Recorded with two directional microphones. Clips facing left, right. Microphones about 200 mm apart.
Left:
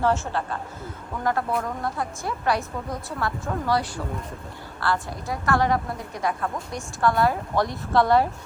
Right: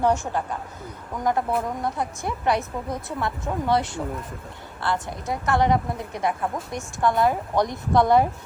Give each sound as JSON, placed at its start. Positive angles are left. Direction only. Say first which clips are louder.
{"t": 0.0, "sound": "a woman's voice", "louder": "right 1 dB", "side_deg": -15}